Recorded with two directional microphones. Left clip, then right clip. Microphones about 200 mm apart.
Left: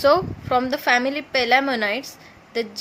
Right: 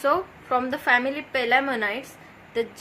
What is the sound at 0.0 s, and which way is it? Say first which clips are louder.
A woman's voice: left 6 dB; 50° left (ahead or behind).